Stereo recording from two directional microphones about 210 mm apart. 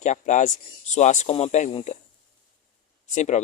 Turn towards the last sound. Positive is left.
turn(degrees=35)  # may be behind; listen again after turning